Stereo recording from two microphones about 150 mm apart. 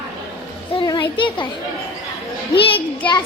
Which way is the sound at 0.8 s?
30° left (ahead or behind).